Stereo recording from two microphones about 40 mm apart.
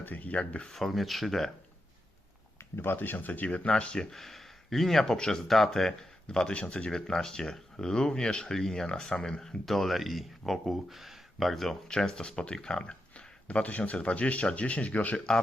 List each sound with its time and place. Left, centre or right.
0.0 s speech: left
0.7 s speech: centre
2.7 s speech: left
4.1 s speech: centre
5.1 s speech: centre
6.2 s speech: left
6.9 s speech: centre
9.6 s speech: centre
11.9 s speech: centre
12.8 s a sound: left
13.9 s speech: left